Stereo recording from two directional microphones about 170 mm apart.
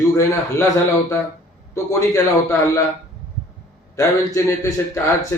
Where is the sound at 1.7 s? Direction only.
20° left (ahead or behind).